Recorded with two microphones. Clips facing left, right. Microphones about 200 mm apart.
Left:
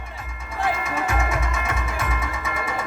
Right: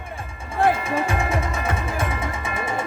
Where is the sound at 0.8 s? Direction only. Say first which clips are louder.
Right 2 dB; 30° right (ahead or behind).